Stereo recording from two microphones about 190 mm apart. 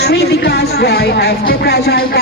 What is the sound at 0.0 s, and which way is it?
Speech, 60° left (ahead or behind).